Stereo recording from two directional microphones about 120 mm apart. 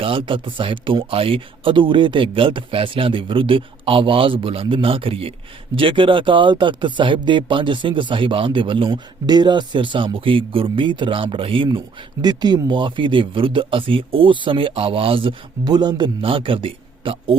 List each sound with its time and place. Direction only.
0.0 s speech: 45° right (ahead or behind)
12.2 s speech: 35° right (ahead or behind)